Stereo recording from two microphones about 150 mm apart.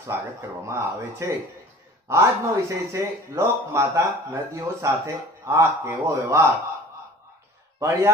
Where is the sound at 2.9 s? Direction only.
20° right (ahead or behind).